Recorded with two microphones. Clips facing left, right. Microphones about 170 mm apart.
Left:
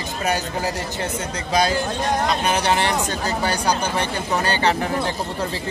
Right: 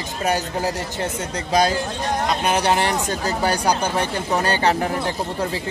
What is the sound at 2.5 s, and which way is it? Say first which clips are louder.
Speech: right 3 dB; 40° right (ahead or behind).